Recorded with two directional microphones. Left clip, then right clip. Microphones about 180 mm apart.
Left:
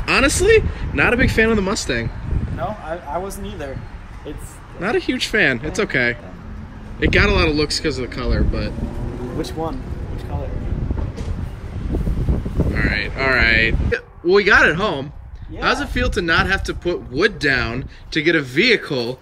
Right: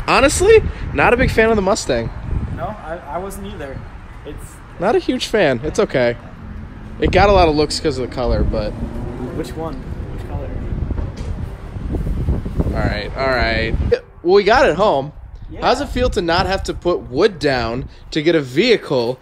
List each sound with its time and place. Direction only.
0.0 s speech: 5° right (ahead or behind)
4.8 s speech: 15° right (ahead or behind)
9.4 s speech: 20° left (ahead or behind)
12.7 s speech: 10° right (ahead or behind)